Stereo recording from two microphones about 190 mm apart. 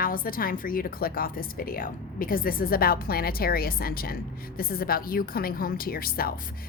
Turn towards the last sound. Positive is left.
turn(degrees=50)  # may be behind; listen again after turning